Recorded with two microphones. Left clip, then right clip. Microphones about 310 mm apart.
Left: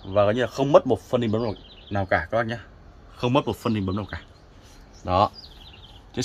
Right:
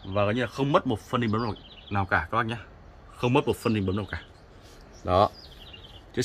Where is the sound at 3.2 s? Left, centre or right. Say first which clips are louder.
Left 1 dB; centre.